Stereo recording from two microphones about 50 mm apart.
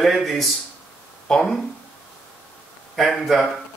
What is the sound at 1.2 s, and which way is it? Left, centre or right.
Speech, centre.